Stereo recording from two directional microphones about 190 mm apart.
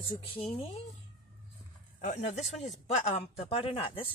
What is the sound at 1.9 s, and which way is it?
A woman's voice, 40° left (ahead or behind).